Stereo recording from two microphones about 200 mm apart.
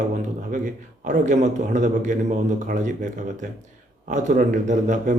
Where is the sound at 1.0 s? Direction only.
35° right (ahead or behind).